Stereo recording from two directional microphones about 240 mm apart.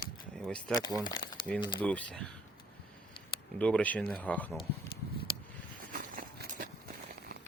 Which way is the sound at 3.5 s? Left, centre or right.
Centre.